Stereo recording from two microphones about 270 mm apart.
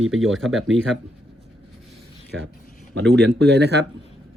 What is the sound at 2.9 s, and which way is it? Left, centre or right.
Speech, right.